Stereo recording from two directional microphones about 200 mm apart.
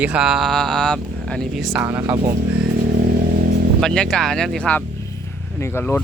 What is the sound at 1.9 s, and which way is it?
Speech, 15° right (ahead or behind).